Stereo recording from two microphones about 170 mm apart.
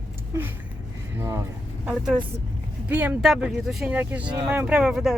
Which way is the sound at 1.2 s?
20° right (ahead or behind).